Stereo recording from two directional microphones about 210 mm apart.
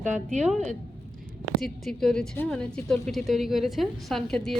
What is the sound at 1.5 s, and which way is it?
A woman's voice, centre (ahead or behind).